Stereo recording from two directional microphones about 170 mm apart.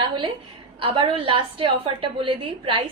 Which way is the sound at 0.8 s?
30° right (ahead or behind).